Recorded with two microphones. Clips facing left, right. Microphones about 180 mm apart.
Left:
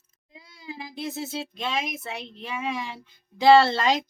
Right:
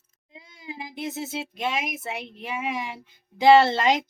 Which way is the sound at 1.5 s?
15° right (ahead or behind).